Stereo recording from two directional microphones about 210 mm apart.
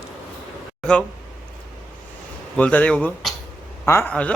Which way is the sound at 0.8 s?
5° left (ahead or behind).